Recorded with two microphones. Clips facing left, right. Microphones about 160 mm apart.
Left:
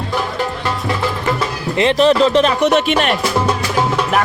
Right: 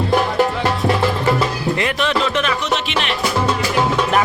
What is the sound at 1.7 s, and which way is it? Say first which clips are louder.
Speech: left 5 dB; 25° left (ahead or behind).